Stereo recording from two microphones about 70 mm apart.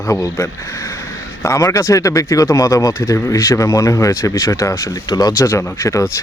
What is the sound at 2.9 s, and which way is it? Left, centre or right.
Speech, left.